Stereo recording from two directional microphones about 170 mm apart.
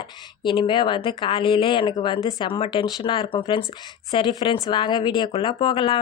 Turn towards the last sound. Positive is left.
turn(degrees=30)  # may be behind; listen again after turning